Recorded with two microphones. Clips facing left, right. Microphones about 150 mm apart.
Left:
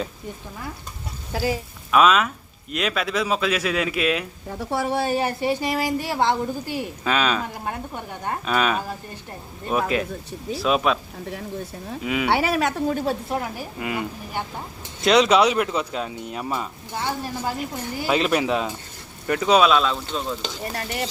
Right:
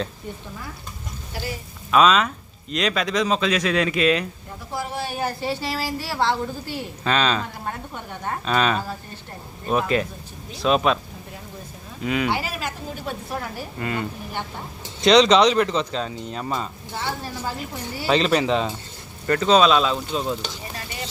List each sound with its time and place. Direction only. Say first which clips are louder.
1.4 s speech: left 7 dB; 90° left
1.9 s speech: even; 5° left (ahead or behind)
4.4 s a woman's voice: left 6 dB; 70° left (ahead or behind)
5.4 s speech: left 4 dB; 15° left (ahead or behind)
12.0 s speech: right 1 dB; 5° left (ahead or behind)
12.3 s a woman's voice: left 6 dB; 70° left (ahead or behind)
13.3 s speech: left 3 dB; 15° left (ahead or behind); by 20.4 s 10° right (ahead or behind)
20.7 s stir: left 6 dB; 65° left (ahead or behind)